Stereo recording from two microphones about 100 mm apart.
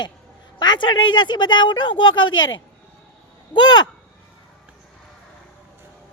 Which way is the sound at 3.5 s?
45° left (ahead or behind).